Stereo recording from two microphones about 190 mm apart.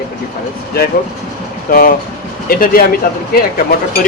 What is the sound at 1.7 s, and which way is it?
Speech, 50° left (ahead or behind).